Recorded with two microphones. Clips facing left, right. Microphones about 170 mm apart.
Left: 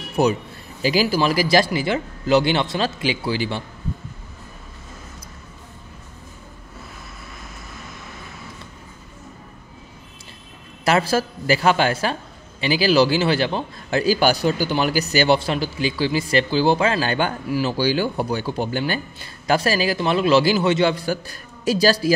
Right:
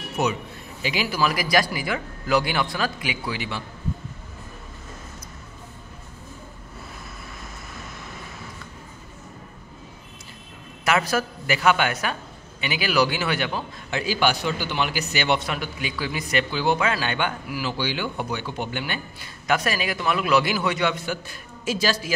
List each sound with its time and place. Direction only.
0.2 s a man's voice: 35° left (ahead or behind)
10.9 s a man's voice: 30° left (ahead or behind)